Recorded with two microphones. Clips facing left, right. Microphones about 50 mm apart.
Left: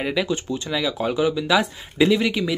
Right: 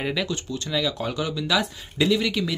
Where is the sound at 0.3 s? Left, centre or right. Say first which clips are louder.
Left 3 dB; centre.